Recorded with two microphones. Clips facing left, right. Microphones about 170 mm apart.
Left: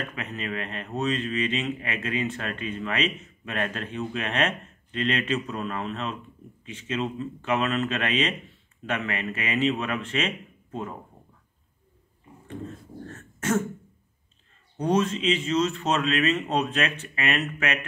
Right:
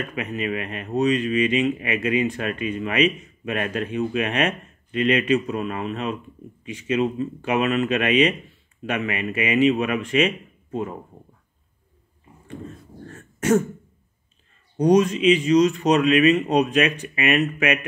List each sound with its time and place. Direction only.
0.1 s speech: 10° right (ahead or behind)
13.1 s throat clearing: 10° right (ahead or behind)
14.8 s speech: 15° right (ahead or behind)